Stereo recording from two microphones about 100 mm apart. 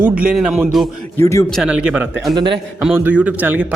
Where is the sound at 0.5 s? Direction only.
Centre (ahead or behind).